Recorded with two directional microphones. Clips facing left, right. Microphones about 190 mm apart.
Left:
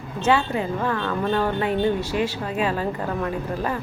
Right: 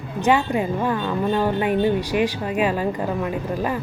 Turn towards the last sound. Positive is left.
turn(degrees=-15)  # may be behind; listen again after turning